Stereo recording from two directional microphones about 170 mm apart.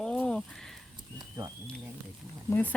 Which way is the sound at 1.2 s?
20° right (ahead or behind).